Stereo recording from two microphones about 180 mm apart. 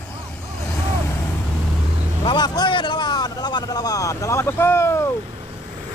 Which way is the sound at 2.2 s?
25° left (ahead or behind).